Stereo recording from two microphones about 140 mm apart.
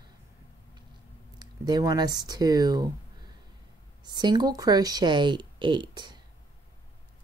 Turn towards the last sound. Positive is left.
turn(degrees=-30)  # may be behind; listen again after turning